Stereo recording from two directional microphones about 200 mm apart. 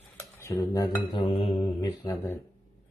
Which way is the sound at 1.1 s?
30° left (ahead or behind).